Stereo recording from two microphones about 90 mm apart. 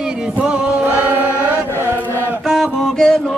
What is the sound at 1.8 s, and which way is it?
Chant, 25° right (ahead or behind).